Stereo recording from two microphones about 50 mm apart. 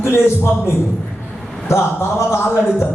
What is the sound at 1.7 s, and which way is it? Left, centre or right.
Speech, left.